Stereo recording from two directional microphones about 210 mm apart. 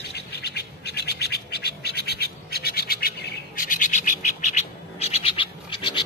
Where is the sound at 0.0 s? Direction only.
50° left (ahead or behind).